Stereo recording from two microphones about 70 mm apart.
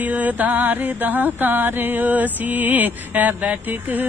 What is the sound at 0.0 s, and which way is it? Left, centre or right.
Music, right.